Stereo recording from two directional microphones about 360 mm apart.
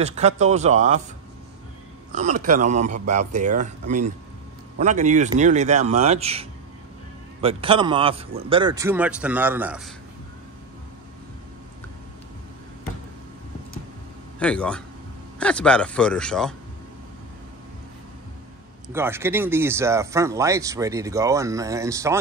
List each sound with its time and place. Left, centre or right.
0.0 s speech: centre
2.1 s speech: right
7.4 s speech: centre
14.4 s a man's voice: centre
18.9 s speech: centre